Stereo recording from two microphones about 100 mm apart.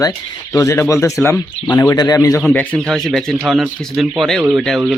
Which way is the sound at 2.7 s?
Centre (ahead or behind).